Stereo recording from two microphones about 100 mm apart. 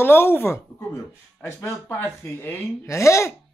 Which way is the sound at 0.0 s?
20° left (ahead or behind).